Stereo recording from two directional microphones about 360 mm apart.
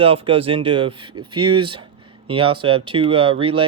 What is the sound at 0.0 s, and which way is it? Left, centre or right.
Speech, centre.